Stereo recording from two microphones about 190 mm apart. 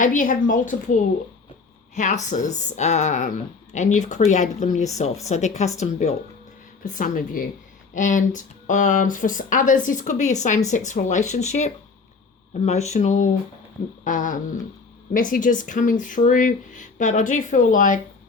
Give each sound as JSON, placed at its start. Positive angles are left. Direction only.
{"t": 0.0, "sound": "speech", "side_deg": 45}
{"t": 2.0, "sound": "speech", "side_deg": 40}
{"t": 12.6, "sound": "speech", "side_deg": 35}